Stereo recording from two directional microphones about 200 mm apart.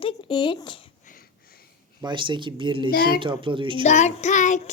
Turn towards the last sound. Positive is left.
turn(degrees=40)  # may be behind; listen again after turning